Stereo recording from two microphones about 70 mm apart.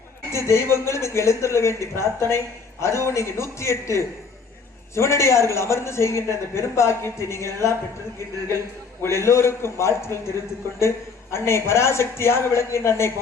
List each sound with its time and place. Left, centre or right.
0.3 s a man's voice: left
9.0 s a man's voice: left